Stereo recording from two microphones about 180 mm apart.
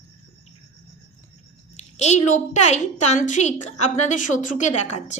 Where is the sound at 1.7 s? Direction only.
40° left (ahead or behind).